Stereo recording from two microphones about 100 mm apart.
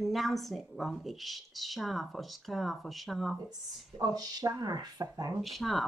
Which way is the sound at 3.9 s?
40° right (ahead or behind).